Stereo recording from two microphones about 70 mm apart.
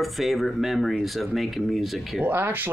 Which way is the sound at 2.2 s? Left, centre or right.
Right.